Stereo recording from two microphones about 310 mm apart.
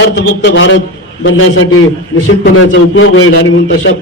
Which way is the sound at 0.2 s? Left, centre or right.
Left.